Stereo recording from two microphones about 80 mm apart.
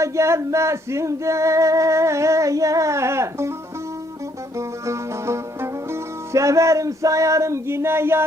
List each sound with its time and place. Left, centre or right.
0.0 s music: right
4.5 s music: right